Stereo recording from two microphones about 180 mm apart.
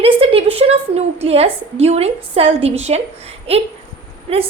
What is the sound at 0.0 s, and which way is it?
A woman's voice, 30° right (ahead or behind).